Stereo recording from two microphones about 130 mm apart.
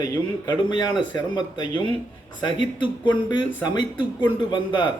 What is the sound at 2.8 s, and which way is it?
Speech, 40° left (ahead or behind).